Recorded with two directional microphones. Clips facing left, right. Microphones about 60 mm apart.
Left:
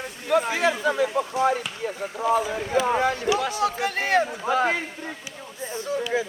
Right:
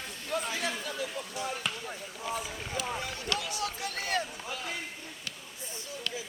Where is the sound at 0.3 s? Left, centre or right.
Left.